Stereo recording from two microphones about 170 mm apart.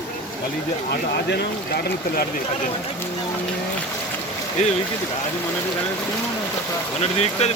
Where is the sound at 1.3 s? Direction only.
65° left (ahead or behind).